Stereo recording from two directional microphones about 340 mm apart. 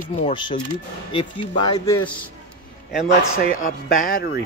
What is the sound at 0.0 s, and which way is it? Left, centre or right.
Speech, centre.